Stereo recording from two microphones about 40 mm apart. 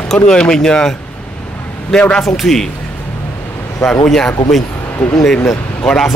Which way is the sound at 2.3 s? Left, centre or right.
Centre.